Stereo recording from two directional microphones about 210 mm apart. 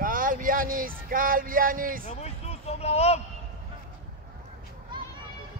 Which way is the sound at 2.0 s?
30° left (ahead or behind).